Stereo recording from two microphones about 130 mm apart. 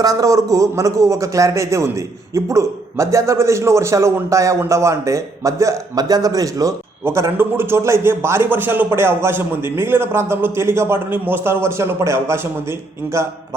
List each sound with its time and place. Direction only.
0.0 s a man's voice: 25° right (ahead or behind)